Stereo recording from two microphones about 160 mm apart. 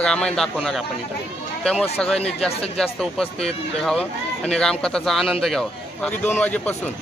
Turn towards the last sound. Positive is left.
turn(degrees=10)  # may be behind; listen again after turning